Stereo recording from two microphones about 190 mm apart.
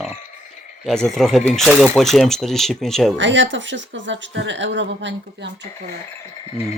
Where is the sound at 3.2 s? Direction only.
70° right (ahead or behind).